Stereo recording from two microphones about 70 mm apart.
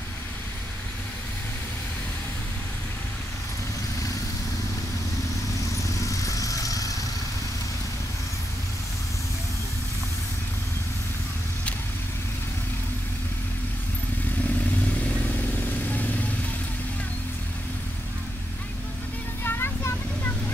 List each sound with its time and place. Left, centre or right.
5.8 s vehicle: left
15.0 s vehicle: left
19.4 s vehicle: left